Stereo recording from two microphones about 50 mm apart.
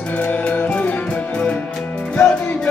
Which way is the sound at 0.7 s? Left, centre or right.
Left.